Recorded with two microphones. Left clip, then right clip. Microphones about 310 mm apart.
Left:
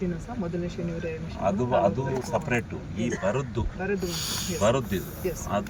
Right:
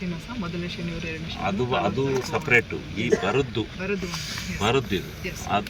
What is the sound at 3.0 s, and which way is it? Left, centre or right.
Speech, centre.